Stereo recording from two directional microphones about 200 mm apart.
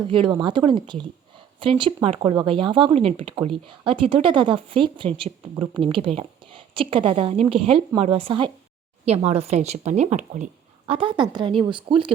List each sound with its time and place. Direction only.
0.0 s speech: 25° right (ahead or behind)